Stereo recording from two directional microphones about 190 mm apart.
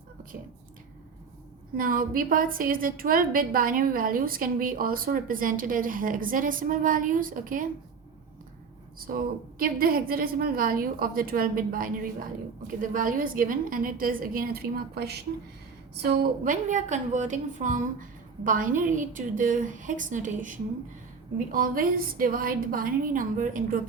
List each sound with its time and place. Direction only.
1.7 s a woman's voice: 50° right (ahead or behind)
9.0 s a woman's voice: 50° right (ahead or behind)